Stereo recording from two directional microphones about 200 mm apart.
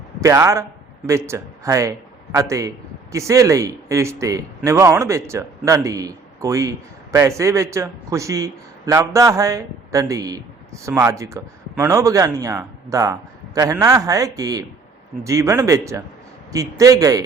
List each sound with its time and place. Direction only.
0.2 s a man's voice: 15° right (ahead or behind)